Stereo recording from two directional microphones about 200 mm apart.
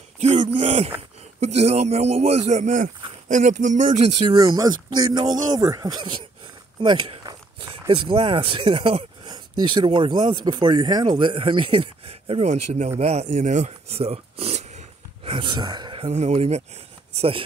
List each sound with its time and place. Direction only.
0.2 s a sound: 30° right (ahead or behind)
1.4 s speech: 30° right (ahead or behind)
4.3 s speech: 20° right (ahead or behind)